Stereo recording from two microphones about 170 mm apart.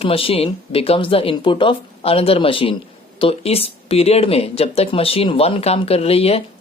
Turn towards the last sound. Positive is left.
turn(degrees=35)  # may be behind; listen again after turning